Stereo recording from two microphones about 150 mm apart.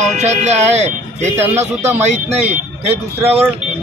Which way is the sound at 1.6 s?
50° right (ahead or behind).